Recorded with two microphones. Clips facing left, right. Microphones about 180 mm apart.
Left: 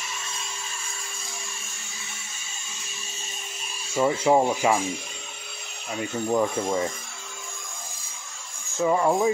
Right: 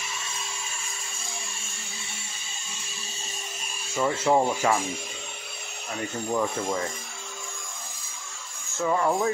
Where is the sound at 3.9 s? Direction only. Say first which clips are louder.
Left 2 dB; 15° left (ahead or behind).